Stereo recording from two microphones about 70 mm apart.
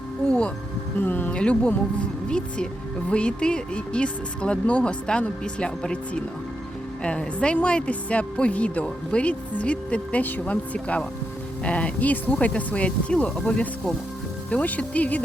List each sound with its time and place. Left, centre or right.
0.3 s speech: centre
0.9 s speech: left
1.4 s speech: centre